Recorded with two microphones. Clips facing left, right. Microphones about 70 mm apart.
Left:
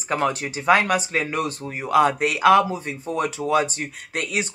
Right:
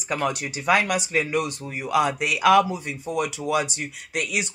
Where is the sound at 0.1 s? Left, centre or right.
Left.